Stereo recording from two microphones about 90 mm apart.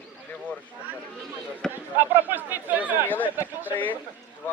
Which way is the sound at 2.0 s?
20° right (ahead or behind).